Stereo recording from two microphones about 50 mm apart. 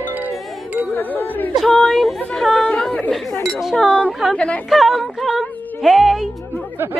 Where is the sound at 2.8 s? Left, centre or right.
Centre.